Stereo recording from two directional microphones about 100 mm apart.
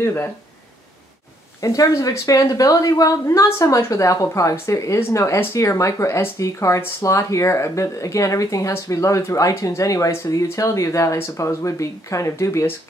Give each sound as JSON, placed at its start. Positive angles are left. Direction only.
{"t": 0.0, "sound": "speech", "side_deg": 25}
{"t": 1.6, "sound": "a woman's voice", "side_deg": 35}